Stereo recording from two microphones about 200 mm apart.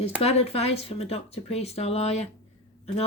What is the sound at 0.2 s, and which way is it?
Speech, 30° left (ahead or behind).